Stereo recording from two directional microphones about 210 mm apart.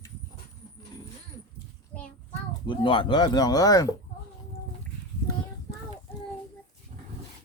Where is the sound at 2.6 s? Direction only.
20° left (ahead or behind).